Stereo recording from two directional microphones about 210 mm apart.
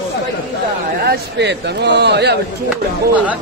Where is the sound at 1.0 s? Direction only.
55° right (ahead or behind).